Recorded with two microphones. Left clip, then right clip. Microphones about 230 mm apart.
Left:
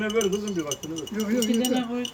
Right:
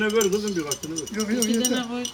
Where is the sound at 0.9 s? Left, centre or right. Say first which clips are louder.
Even; centre.